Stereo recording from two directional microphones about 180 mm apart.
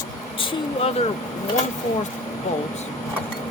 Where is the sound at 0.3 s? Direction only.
30° left (ahead or behind).